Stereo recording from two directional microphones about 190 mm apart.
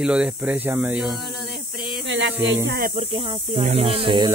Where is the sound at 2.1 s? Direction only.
75° right (ahead or behind).